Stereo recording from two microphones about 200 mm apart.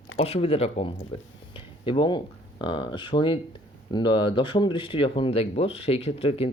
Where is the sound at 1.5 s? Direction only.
25° left (ahead or behind).